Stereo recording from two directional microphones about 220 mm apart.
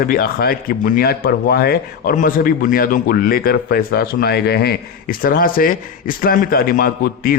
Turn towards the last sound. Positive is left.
turn(degrees=40)  # may be behind; listen again after turning